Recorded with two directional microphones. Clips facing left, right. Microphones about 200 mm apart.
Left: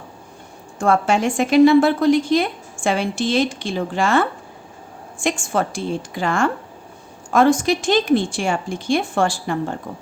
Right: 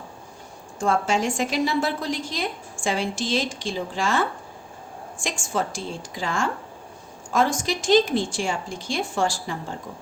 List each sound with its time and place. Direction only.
0.8 s a woman's voice: 60° left (ahead or behind)